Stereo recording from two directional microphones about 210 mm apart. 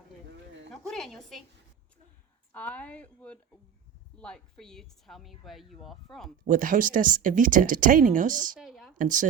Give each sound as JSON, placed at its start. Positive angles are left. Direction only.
{"t": 0.7, "sound": "a woman's voice", "side_deg": 0}
{"t": 2.5, "sound": "a woman's voice", "side_deg": 5}
{"t": 6.5, "sound": "speech", "side_deg": -40}
{"t": 8.5, "sound": "a woman's voice", "side_deg": 0}
{"t": 9.0, "sound": "speech", "side_deg": -40}